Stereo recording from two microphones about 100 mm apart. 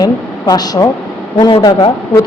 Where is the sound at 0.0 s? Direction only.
40° left (ahead or behind).